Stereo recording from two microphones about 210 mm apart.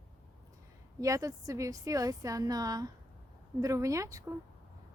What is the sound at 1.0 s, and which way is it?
A woman's voice, 15° right (ahead or behind).